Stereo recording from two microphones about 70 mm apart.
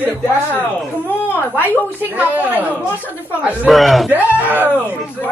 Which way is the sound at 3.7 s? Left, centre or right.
Centre.